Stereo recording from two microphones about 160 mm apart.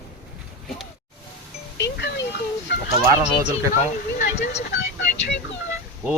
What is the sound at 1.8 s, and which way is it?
Music, 90° left.